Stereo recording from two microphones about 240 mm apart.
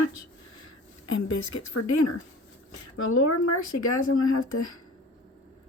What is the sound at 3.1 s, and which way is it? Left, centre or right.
Speech, left.